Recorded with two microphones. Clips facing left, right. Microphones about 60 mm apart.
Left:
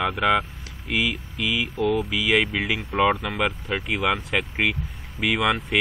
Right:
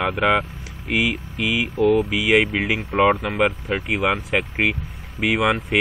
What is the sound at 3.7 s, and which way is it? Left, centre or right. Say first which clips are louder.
Speech: right 3 dB; centre.